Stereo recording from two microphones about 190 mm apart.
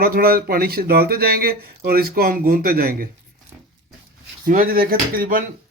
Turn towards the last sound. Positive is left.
turn(degrees=-50)  # may be behind; listen again after turning